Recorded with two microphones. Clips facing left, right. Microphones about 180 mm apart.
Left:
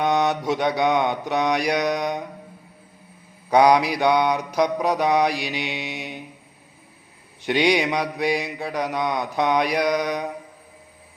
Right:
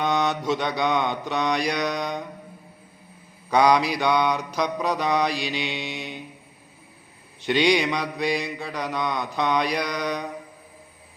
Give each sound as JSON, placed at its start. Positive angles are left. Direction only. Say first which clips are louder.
{"t": 0.0, "sound": "mantra", "louder": "left 3 dB", "side_deg": 15}
{"t": 3.5, "sound": "mantra", "louder": "left 3 dB", "side_deg": 15}
{"t": 7.4, "sound": "mantra", "louder": "left 1 dB", "side_deg": 15}